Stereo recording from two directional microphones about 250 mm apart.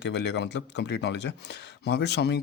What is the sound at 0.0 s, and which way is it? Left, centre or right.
Speech, left.